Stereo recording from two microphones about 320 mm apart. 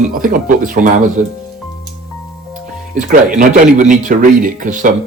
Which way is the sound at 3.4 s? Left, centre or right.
Right.